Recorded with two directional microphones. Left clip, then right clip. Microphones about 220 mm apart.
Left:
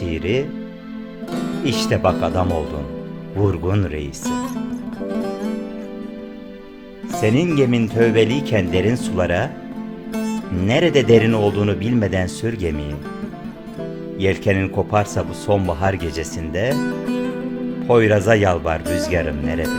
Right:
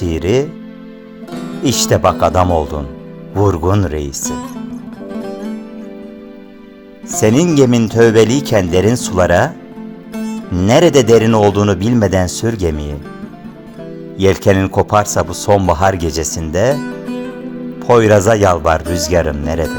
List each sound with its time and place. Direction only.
0.0 s speech: 20° right (ahead or behind)
1.3 s music: centre (ahead or behind)
1.6 s speech: 20° right (ahead or behind)
2.5 s speech: centre (ahead or behind)
3.3 s speech: 15° right (ahead or behind)
4.2 s music: centre (ahead or behind)
7.2 s speech: 25° right (ahead or behind)
10.1 s music: centre (ahead or behind)
10.6 s speech: 20° right (ahead or behind)
14.2 s speech: 25° right (ahead or behind)
16.7 s music: centre (ahead or behind)
17.8 s speech: 20° right (ahead or behind)